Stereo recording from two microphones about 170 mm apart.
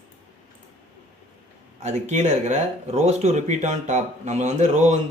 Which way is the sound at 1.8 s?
40° right (ahead or behind).